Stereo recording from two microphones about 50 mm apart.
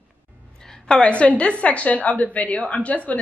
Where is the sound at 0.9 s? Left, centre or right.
Left.